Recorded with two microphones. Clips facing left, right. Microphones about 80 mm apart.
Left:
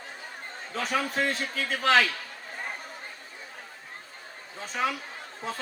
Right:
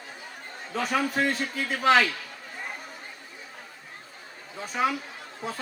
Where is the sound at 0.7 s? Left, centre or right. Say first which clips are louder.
Right 2 dB; centre.